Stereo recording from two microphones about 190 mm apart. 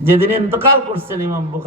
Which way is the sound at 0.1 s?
10° right (ahead or behind).